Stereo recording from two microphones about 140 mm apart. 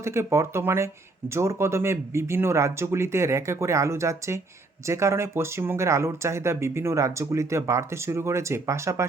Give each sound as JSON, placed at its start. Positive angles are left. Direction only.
{"t": 0.0, "sound": "speech", "side_deg": -20}